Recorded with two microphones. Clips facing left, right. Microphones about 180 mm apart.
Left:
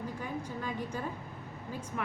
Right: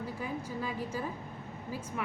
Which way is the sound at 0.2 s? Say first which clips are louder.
Right 1 dB; 10° right (ahead or behind).